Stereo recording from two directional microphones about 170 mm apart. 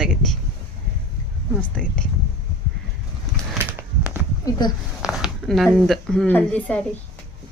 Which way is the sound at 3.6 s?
15° right (ahead or behind).